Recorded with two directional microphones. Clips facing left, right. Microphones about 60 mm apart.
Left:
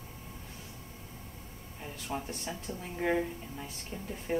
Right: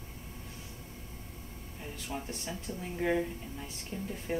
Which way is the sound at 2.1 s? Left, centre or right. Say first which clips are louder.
Left 3 dB; left.